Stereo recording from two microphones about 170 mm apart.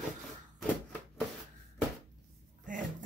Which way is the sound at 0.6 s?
5° left (ahead or behind).